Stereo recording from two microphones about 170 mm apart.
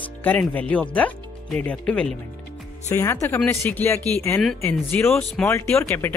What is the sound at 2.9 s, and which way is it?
Speech, 15° left (ahead or behind).